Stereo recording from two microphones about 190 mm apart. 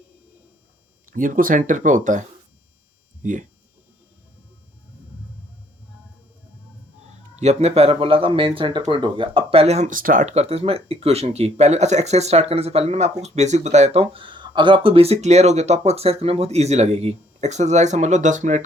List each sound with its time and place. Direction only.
1.1 s speech: 45° right (ahead or behind)
3.2 s speech: 45° right (ahead or behind)
7.3 s speech: 35° right (ahead or behind)